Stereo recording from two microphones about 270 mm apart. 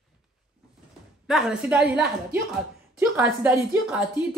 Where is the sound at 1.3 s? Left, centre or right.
Centre.